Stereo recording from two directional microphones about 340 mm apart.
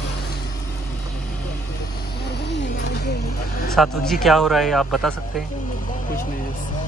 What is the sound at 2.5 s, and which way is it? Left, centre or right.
Vehicle, left.